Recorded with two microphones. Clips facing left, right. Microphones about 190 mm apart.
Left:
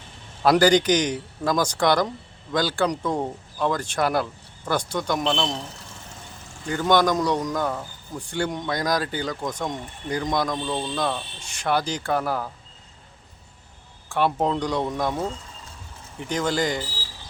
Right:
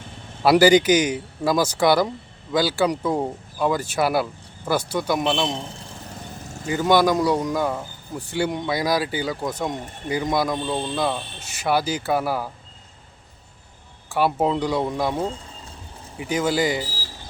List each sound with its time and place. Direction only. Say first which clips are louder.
0.4 s speech: right 3 dB; 5° right (ahead or behind)
6.7 s speech: right 2 dB; 5° right (ahead or behind)
14.1 s speech: right 2 dB; 5° right (ahead or behind)
15.1 s speech: right 2 dB; 30° right (ahead or behind)
16.1 s speech: right 3 dB; 5° right (ahead or behind)